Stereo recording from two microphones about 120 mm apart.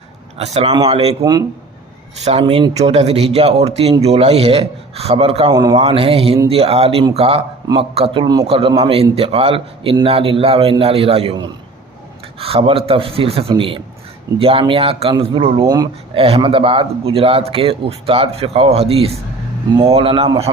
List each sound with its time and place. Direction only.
0.3 s a man's voice: 65° right (ahead or behind)
1.2 s a man's voice: 30° right (ahead or behind)
2.5 s a man's voice: 50° right (ahead or behind)
8.2 s a man's voice: 35° right (ahead or behind)
8.4 s speech: 50° right (ahead or behind)
12.4 s speech: 55° right (ahead or behind)
15.6 s a man's voice: 35° right (ahead or behind)
16.1 s speech: 55° right (ahead or behind)